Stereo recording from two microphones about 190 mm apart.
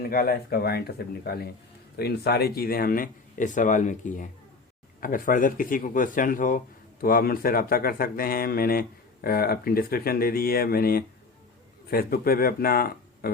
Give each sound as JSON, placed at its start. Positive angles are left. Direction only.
{"t": 0.0, "sound": "speech", "side_deg": 55}